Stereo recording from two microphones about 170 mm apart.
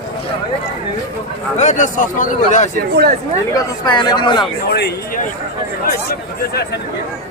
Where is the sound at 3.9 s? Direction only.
25° left (ahead or behind).